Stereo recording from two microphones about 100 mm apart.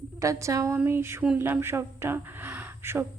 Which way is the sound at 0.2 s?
30° right (ahead or behind).